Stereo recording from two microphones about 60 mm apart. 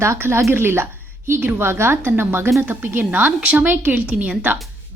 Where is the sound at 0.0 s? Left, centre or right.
Right.